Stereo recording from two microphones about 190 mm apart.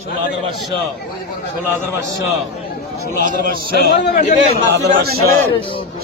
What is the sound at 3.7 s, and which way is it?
Speech, 55° left (ahead or behind).